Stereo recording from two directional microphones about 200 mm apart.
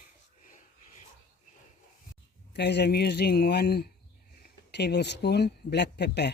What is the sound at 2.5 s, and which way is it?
Speech, 55° left (ahead or behind).